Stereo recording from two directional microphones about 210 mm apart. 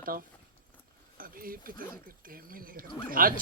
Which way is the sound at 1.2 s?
45° right (ahead or behind).